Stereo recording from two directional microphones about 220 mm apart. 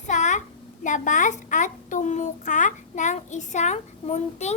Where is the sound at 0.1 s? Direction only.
35° left (ahead or behind).